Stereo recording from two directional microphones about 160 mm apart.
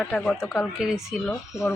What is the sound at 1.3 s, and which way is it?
Speech, 20° left (ahead or behind).